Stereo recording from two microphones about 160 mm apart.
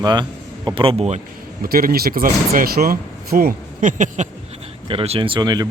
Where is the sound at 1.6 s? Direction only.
65° right (ahead or behind).